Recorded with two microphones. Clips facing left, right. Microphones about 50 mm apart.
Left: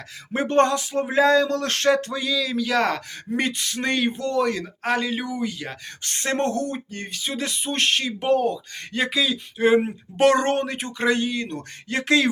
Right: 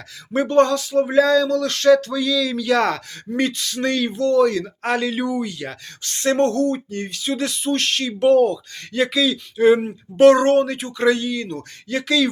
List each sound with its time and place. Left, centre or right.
0.4 s speech: left
1.1 s a sound: left
2.2 s speech: centre
3.3 s speech: left
4.6 s speech: centre
6.0 s speech: left
9.7 s speech: left
11.5 s a sound: left